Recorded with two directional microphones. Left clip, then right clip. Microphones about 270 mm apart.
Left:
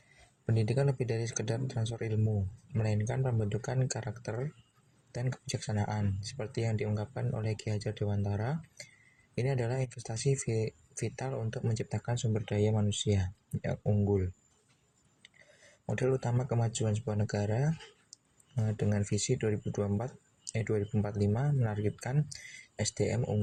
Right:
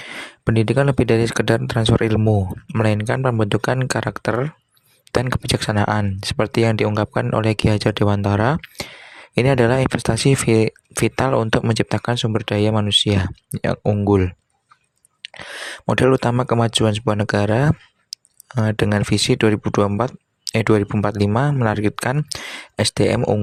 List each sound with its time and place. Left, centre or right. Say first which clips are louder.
0.4 s speech: right 15 dB; right
15.9 s speech: right 16 dB; right